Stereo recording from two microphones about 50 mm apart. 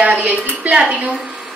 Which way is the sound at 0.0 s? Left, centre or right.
Right.